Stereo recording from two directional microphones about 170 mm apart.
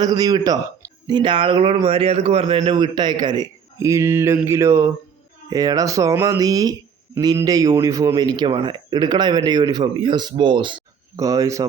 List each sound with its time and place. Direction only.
0.0 s a man's voice: 20° right (ahead or behind)